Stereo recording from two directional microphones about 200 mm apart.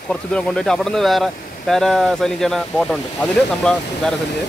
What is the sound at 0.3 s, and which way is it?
Speech, centre (ahead or behind).